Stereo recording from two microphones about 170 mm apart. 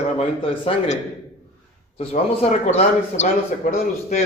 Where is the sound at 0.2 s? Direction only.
35° left (ahead or behind).